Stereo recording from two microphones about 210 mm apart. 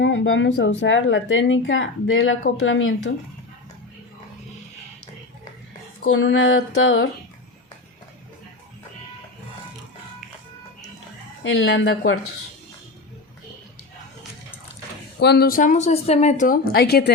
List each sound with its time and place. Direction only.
0.0 s speech: 60° left (ahead or behind)
6.1 s speech: 65° left (ahead or behind)
11.4 s speech: 60° left (ahead or behind)
15.2 s speech: 50° left (ahead or behind); by 16.5 s 30° left (ahead or behind)
16.5 s speech: 50° left (ahead or behind)